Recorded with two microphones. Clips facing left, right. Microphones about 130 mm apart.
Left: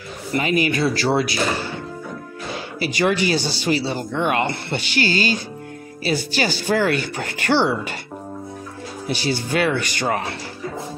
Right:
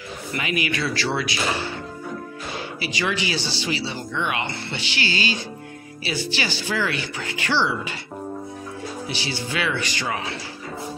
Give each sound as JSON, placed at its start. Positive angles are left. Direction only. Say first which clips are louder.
{"t": 0.3, "sound": "speech", "louder": "left 6 dB", "side_deg": 35}
{"t": 2.8, "sound": "speech", "louder": "left 7 dB", "side_deg": 50}
{"t": 9.1, "sound": "speech", "louder": "left 9 dB", "side_deg": 50}